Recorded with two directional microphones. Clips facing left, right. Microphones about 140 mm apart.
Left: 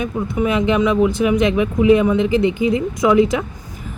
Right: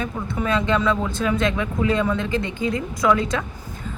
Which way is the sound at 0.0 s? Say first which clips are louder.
Left 6 dB; 15° left (ahead or behind).